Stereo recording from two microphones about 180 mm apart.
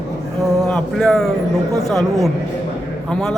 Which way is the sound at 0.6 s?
5° left (ahead or behind).